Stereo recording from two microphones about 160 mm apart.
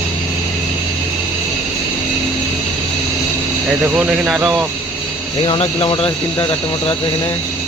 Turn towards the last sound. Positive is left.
turn(degrees=35)  # may be behind; listen again after turning